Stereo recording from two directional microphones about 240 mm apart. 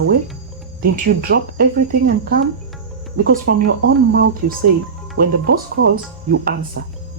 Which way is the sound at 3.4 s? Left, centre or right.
Right.